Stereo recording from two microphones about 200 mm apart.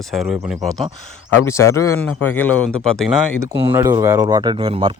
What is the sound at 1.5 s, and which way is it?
Speech, 15° left (ahead or behind).